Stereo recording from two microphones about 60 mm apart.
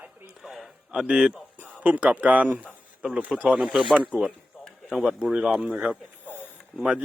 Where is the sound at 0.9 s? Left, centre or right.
Centre.